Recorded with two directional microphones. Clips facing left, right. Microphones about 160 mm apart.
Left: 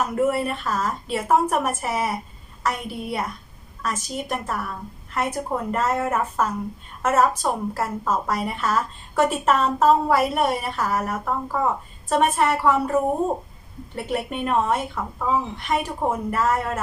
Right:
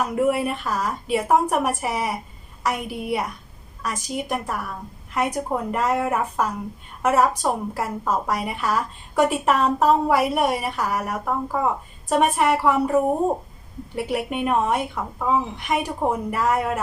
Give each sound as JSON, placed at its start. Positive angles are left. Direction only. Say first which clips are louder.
{"t": 0.3, "sound": "a woman's voice", "louder": "right 1 dB", "side_deg": -10}